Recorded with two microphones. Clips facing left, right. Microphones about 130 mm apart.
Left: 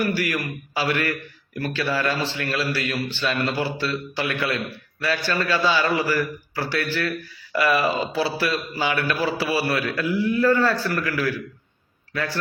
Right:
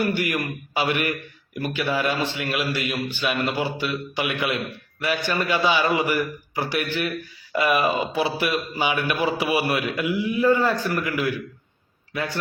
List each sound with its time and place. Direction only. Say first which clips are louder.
0.0 s a man's voice: even; 20° right (ahead or behind)